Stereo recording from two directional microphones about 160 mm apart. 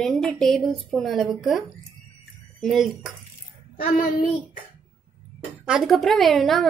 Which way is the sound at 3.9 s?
55° left (ahead or behind).